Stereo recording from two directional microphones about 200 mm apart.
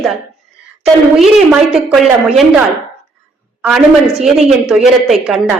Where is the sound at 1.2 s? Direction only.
Centre (ahead or behind).